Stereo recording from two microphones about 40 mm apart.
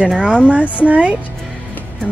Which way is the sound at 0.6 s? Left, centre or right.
Right.